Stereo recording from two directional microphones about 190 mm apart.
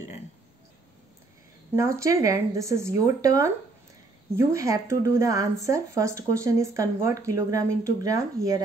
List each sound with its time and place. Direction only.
1.8 s speech: 15° right (ahead or behind)